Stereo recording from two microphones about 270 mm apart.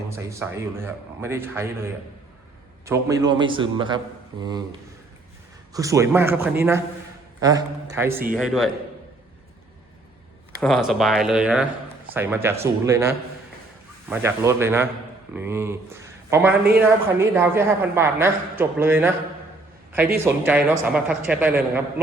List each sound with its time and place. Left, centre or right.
0.2 s a woman's voice: centre
5.7 s a woman's voice: centre
10.6 s a woman's voice: centre
20.1 s a woman's voice: centre